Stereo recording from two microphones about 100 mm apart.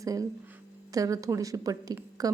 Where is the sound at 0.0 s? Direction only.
35° right (ahead or behind).